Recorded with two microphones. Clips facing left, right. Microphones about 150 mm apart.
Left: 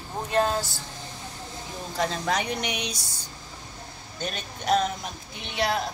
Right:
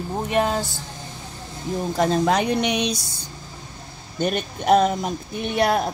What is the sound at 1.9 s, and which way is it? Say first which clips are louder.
Speech: right 7 dB; 50° right (ahead or behind).